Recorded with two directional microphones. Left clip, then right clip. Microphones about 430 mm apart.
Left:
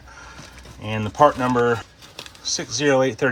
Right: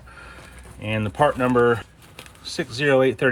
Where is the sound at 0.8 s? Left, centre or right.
Centre.